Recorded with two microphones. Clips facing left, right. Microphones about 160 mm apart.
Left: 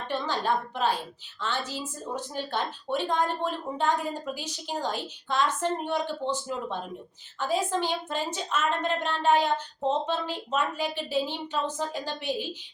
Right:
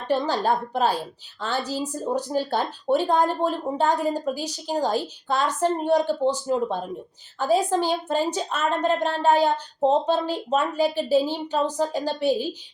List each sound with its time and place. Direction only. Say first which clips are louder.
0.1 s speech: right 6 dB; 35° right (ahead or behind)